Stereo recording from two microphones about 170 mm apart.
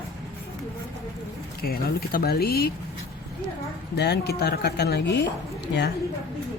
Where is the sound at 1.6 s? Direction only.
60° left (ahead or behind).